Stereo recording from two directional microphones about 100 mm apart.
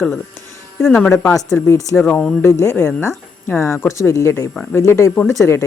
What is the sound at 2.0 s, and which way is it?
Speech, 10° left (ahead or behind).